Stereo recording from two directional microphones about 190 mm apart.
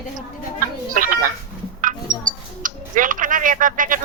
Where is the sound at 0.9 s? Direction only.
45° right (ahead or behind).